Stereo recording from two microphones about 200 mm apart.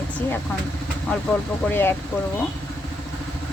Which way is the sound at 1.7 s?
10° left (ahead or behind).